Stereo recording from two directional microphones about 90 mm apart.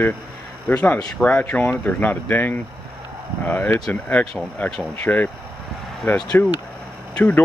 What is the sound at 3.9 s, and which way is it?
Speech, 15° left (ahead or behind).